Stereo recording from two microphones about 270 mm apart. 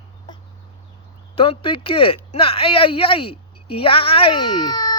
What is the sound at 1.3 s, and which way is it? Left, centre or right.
Speech, centre.